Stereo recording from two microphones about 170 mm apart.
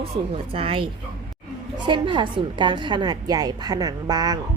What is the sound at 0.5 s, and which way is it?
Speech, 30° right (ahead or behind).